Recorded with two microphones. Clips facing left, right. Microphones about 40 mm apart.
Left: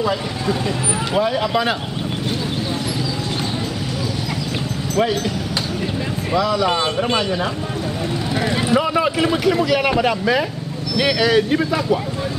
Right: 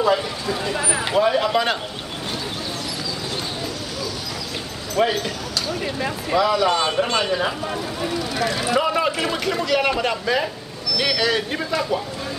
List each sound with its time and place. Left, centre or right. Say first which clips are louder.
0.0 s speech: right 1 dB; centre
4.9 s speech: left 1 dB; centre
6.3 s speech: even; centre
8.4 s speech: left 3 dB; left
8.6 s a man's voice: left 2 dB; centre